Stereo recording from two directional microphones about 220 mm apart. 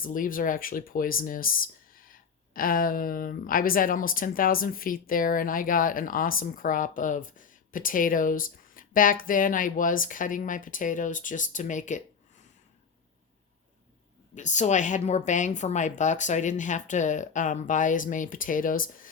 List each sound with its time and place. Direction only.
0.0 s speech: 40° left (ahead or behind)
14.3 s speech: 35° left (ahead or behind)